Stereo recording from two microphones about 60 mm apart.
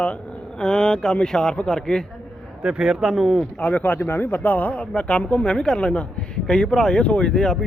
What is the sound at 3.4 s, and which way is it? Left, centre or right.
Speech, left.